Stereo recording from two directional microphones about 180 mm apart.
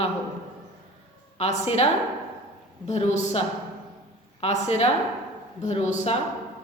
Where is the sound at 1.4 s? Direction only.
35° left (ahead or behind).